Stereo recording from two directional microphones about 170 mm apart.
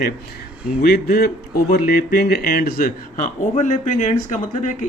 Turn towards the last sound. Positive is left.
turn(degrees=45)  # may be behind; listen again after turning